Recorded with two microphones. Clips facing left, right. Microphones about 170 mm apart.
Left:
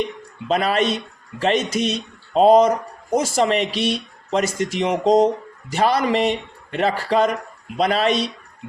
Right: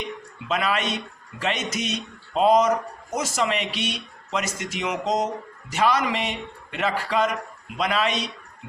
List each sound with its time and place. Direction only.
0.4 s speech: 35° left (ahead or behind)